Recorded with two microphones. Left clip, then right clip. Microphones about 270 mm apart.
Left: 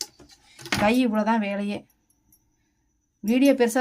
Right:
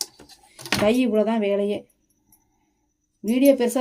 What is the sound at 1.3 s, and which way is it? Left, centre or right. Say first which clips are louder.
Speech: right 5 dB; left.